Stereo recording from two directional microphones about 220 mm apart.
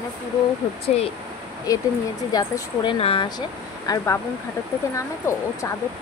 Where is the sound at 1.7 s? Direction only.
15° left (ahead or behind).